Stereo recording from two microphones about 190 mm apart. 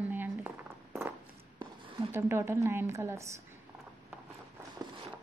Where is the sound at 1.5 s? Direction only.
25° right (ahead or behind).